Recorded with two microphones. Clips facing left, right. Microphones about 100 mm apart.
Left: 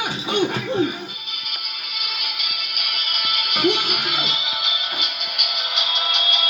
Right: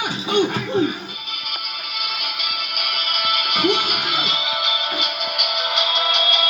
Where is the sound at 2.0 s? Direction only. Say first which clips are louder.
Right 3 dB; 35° right (ahead or behind).